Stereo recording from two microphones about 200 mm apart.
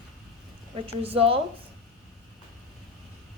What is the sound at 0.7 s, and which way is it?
Speech, 30° right (ahead or behind).